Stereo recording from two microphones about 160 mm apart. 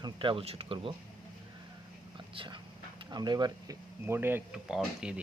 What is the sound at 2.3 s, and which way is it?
Speech, 35° right (ahead or behind).